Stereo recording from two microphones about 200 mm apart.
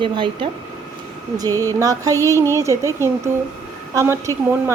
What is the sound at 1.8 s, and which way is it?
A woman's voice, 15° right (ahead or behind).